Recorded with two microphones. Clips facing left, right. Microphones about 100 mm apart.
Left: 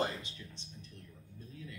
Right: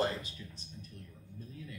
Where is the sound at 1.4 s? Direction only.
35° right (ahead or behind).